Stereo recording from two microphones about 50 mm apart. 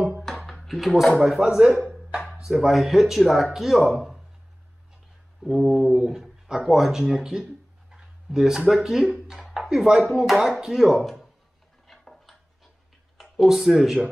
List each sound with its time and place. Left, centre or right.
0.5 s speech: centre
1.9 s a sound: right
2.3 s speech: centre
5.4 s speech: centre
11.9 s a sound: centre
13.2 s speech: centre